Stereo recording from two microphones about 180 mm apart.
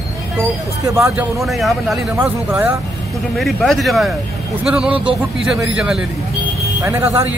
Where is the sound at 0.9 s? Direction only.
15° right (ahead or behind).